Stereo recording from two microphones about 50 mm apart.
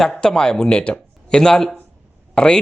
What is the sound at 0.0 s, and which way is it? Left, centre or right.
A man's voice, centre.